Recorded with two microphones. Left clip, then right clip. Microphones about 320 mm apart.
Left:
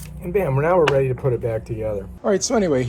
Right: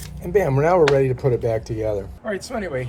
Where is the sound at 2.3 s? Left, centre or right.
Centre.